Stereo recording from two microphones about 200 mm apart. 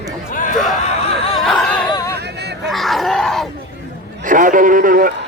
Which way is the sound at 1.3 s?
Centre (ahead or behind).